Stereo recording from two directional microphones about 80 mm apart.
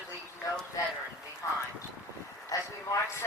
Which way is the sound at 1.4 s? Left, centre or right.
Left.